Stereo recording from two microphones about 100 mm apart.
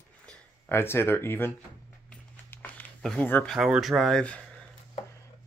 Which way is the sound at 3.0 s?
5° left (ahead or behind).